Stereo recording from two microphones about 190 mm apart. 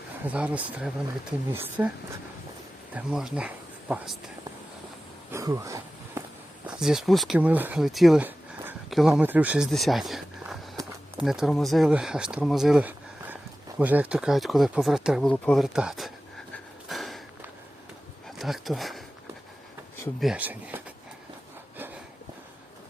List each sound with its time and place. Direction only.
0.3 s speech: 5° right (ahead or behind)
2.9 s speech: 5° right (ahead or behind)
5.3 s a sound: 15° right (ahead or behind)
6.7 s speech: 5° right (ahead or behind)
16.9 s walk: centre (ahead or behind)
18.3 s speech: centre (ahead or behind)
20.1 s speech: 5° right (ahead or behind)